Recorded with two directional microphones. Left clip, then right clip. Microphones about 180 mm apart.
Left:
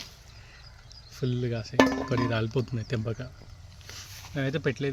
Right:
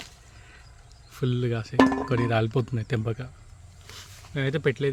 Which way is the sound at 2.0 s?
50° right (ahead or behind).